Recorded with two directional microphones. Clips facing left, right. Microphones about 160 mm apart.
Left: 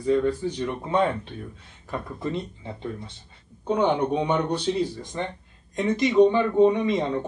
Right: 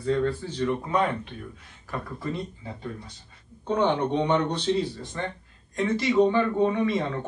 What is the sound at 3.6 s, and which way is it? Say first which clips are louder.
Speech: left 2 dB; 10° left (ahead or behind).